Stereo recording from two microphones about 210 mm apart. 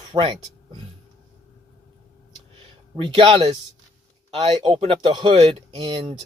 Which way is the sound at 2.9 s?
25° right (ahead or behind).